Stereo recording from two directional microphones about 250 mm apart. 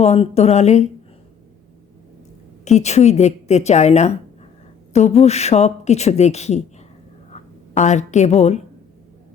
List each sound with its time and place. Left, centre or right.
0.0 s speech: left
2.6 s speech: left
7.3 s a sound: left